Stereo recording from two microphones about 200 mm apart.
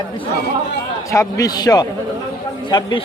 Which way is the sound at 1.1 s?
15° left (ahead or behind).